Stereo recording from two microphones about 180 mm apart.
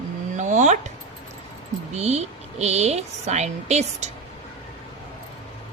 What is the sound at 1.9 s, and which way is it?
A woman's voice, 40° right (ahead or behind).